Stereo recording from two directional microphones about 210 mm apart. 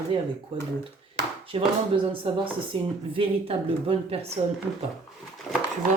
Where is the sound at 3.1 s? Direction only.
25° right (ahead or behind).